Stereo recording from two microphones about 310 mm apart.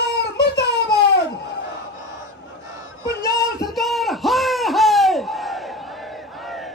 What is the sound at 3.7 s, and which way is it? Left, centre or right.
Crowd, centre.